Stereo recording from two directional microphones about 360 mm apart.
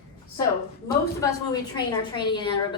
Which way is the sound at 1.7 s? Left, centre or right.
Centre.